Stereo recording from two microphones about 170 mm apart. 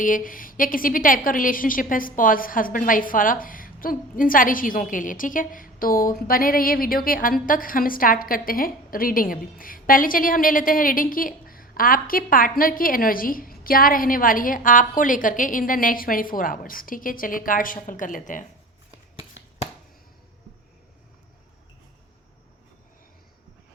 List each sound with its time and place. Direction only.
0.0 s a woman's voice: 50° left (ahead or behind)